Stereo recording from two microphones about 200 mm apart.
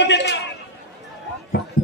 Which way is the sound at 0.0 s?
60° left (ahead or behind).